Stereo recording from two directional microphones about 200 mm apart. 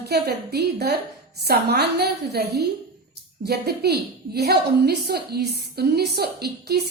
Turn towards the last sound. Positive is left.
turn(degrees=-55)  # may be behind; listen again after turning